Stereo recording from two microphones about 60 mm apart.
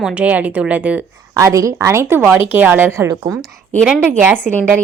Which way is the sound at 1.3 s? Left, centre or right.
Right.